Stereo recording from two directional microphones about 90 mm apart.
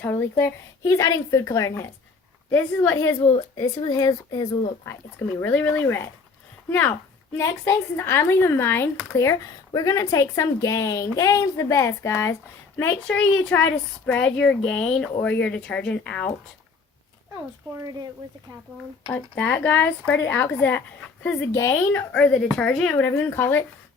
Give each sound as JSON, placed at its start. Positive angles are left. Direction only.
{"t": 0.0, "sound": "a woman's voice", "side_deg": 25}
{"t": 2.5, "sound": "speech", "side_deg": 20}
{"t": 3.3, "sound": "speech", "side_deg": 50}
{"t": 4.9, "sound": "speech", "side_deg": 30}
{"t": 7.3, "sound": "a woman's voice", "side_deg": 35}
{"t": 12.8, "sound": "speech", "side_deg": 20}
{"t": 19.4, "sound": "speech", "side_deg": 15}
{"t": 21.5, "sound": "a woman's voice", "side_deg": 35}
{"t": 21.9, "sound": "speech", "side_deg": 15}
{"t": 23.0, "sound": "speech", "side_deg": 25}